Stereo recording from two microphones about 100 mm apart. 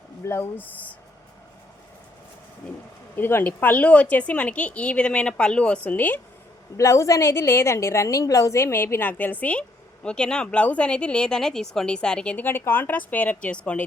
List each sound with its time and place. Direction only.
0.3 s speech: 25° left (ahead or behind)
3.2 s a woman's voice: 20° left (ahead or behind)
6.7 s a woman's voice: 30° left (ahead or behind); by 13.8 s 10° left (ahead or behind)